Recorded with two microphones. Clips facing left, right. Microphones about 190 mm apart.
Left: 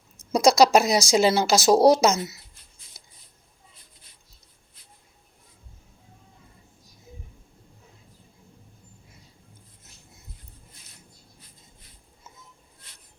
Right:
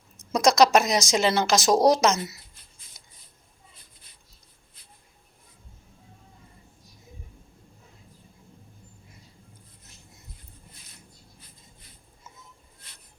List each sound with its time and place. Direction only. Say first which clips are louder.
0.2 s speech: left 2 dB; 10° left (ahead or behind)
1.7 s speech: left 3 dB; 30° left (ahead or behind)
2.0 s speech: left 1 dB; 10° left (ahead or behind)